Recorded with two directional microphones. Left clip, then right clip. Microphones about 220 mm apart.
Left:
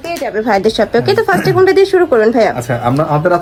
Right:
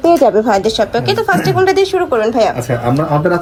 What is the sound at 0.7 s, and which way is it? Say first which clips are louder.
Speech: left 2 dB; 20° left (ahead or behind).